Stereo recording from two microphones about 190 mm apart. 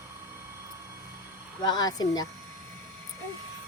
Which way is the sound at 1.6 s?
20° left (ahead or behind).